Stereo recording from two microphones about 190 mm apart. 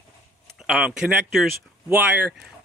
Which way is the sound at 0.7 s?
5° right (ahead or behind).